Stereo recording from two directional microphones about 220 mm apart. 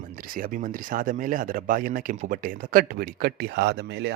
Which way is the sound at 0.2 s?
40° right (ahead or behind).